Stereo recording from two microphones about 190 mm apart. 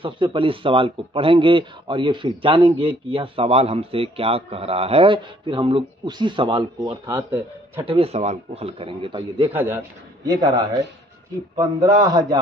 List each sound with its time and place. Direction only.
0.0 s a man's voice: 25° right (ahead or behind)
9.5 s a man's voice: 10° right (ahead or behind)